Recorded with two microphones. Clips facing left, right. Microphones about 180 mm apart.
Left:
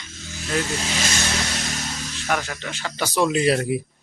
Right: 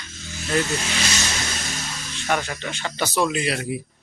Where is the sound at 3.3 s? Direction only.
40° left (ahead or behind).